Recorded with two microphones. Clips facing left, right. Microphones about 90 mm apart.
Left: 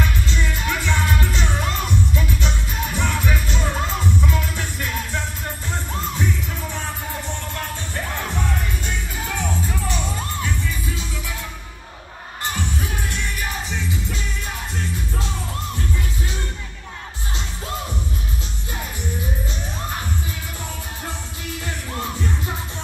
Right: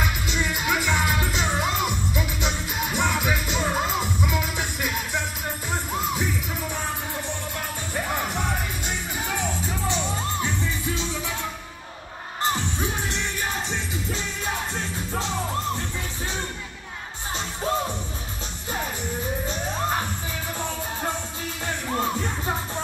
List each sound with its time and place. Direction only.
0.0 s music: 15° right (ahead or behind)
7.5 s music: 15° right (ahead or behind)
12.4 s music: 25° right (ahead or behind)
21.6 s music: 35° right (ahead or behind)